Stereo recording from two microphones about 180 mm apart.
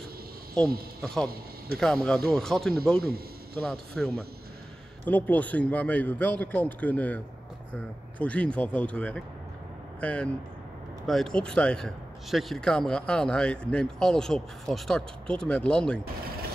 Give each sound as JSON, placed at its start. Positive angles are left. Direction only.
{"t": 1.0, "sound": "a man's voice", "side_deg": 5}
{"t": 3.0, "sound": "speech", "side_deg": -60}
{"t": 3.6, "sound": "a man's voice", "side_deg": 5}
{"t": 8.2, "sound": "a man's voice", "side_deg": 5}